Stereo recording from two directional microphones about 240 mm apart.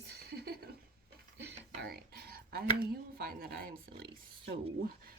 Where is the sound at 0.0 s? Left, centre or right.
Right.